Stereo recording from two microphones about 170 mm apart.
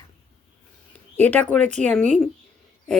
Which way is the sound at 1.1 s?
10° left (ahead or behind).